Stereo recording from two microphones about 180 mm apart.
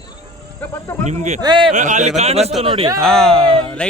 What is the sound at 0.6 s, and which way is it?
Speech, 15° left (ahead or behind).